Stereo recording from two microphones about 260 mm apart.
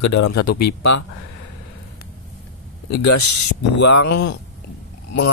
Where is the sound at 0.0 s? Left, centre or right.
Left.